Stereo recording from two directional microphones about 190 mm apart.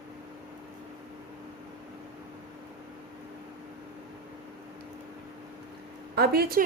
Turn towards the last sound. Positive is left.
turn(degrees=-50)  # may be behind; listen again after turning